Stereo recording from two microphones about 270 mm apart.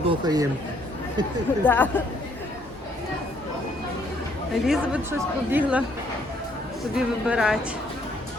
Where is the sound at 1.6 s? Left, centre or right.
Centre.